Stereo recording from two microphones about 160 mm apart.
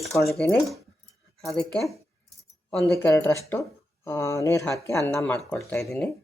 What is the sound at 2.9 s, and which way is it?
Speech, 20° left (ahead or behind).